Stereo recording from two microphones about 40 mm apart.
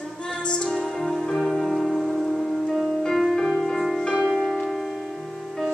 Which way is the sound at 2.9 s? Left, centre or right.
Centre.